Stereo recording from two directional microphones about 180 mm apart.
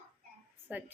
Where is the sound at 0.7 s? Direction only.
10° right (ahead or behind).